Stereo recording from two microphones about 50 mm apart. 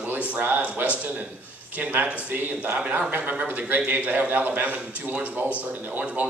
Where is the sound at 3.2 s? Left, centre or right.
Right.